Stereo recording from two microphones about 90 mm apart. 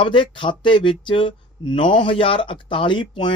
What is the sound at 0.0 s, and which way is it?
A woman's voice, 70° left (ahead or behind).